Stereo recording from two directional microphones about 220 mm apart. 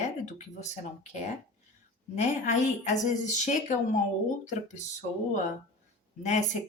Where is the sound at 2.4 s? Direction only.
30° left (ahead or behind).